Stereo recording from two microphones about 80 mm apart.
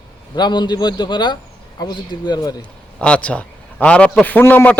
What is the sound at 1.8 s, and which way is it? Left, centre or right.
Speech, left.